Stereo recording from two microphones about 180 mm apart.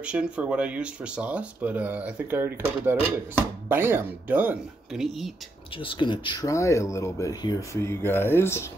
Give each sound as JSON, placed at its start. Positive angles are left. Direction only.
{"t": 0.0, "sound": "speech", "side_deg": -5}
{"t": 5.8, "sound": "speech", "side_deg": 30}